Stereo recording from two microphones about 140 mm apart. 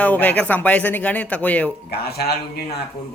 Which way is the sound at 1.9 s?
90° left.